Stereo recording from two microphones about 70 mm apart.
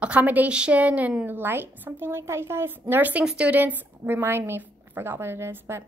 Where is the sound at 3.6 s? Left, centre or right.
Right.